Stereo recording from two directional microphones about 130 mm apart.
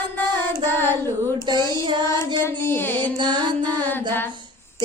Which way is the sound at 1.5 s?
35° right (ahead or behind).